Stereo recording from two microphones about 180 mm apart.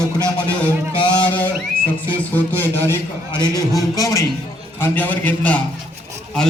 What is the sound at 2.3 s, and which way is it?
A man's voice, 10° left (ahead or behind).